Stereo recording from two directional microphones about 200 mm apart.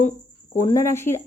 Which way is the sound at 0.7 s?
15° left (ahead or behind).